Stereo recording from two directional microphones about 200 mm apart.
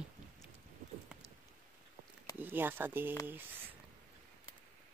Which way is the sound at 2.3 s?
10° right (ahead or behind).